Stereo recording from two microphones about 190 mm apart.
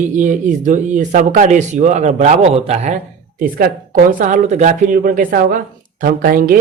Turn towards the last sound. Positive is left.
turn(degrees=-50)  # may be behind; listen again after turning